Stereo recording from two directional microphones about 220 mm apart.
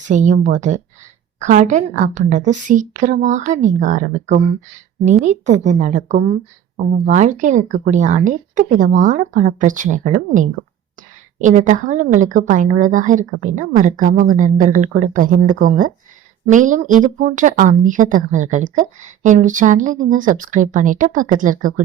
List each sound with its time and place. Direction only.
0.0 s speech: 35° right (ahead or behind)